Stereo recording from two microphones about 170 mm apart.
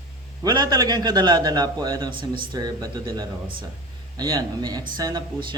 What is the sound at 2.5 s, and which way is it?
Speech, 25° right (ahead or behind).